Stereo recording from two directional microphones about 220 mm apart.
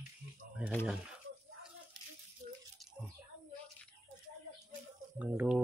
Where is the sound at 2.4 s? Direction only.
40° right (ahead or behind).